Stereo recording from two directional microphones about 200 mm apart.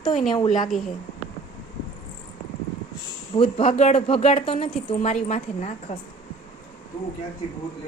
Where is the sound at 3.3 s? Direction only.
25° left (ahead or behind).